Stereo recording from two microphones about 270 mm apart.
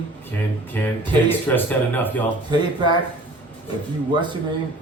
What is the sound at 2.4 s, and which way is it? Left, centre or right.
Speech, centre.